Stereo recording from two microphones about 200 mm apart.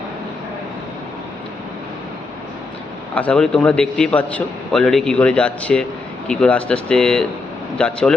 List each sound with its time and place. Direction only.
3.2 s a man's voice: 5° left (ahead or behind)